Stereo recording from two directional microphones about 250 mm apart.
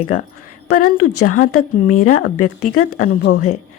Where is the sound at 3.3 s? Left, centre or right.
Left.